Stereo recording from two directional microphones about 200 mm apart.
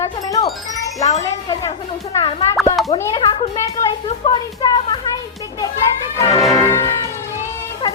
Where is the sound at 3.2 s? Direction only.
30° left (ahead or behind).